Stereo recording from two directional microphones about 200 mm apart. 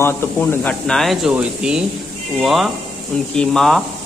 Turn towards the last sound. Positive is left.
turn(degrees=0)  # may be behind; listen again after turning